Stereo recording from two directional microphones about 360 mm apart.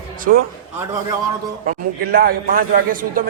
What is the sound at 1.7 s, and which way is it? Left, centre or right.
A man's voice, right.